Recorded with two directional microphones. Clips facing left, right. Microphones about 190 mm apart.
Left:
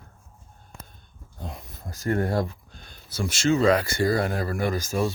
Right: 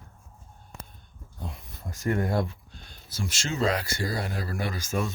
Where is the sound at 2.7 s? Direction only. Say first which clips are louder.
Left 1 dB; 55° left (ahead or behind); by 5.1 s 40° left (ahead or behind).